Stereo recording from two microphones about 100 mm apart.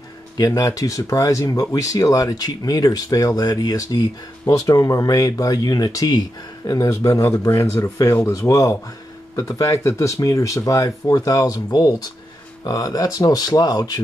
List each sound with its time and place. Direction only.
0.4 s speech: 35° left (ahead or behind)